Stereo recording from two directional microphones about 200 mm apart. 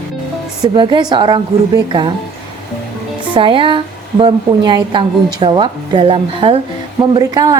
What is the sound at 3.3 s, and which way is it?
A woman's voice, 25° right (ahead or behind).